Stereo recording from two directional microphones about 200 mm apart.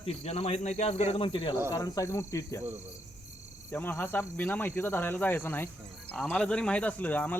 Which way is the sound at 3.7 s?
10° left (ahead or behind).